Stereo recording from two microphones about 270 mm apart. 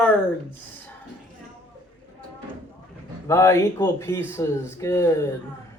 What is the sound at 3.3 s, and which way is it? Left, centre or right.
Speech, centre.